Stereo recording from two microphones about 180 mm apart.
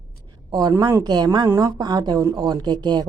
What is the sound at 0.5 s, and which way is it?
A woman's voice, 25° right (ahead or behind).